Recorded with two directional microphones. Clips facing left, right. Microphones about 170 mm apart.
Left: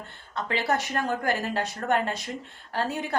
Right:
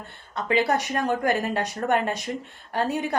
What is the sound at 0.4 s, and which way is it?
A woman's voice, 15° right (ahead or behind).